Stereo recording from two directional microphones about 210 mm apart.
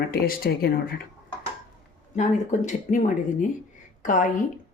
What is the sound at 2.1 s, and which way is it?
Speech, 35° left (ahead or behind).